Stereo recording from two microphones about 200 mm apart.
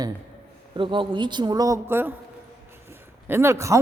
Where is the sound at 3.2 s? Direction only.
10° right (ahead or behind).